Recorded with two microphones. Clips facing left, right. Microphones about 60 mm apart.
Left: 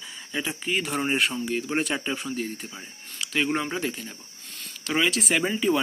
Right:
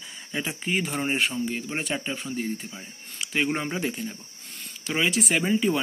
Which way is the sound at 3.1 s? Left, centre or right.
Centre.